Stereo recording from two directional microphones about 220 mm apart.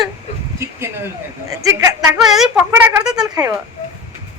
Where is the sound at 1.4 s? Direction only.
15° right (ahead or behind).